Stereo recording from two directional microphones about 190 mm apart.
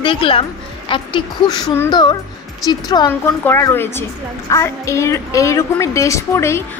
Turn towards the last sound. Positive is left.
turn(degrees=15)  # may be behind; listen again after turning